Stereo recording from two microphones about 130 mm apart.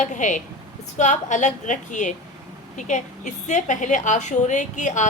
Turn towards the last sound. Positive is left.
turn(degrees=70)  # may be behind; listen again after turning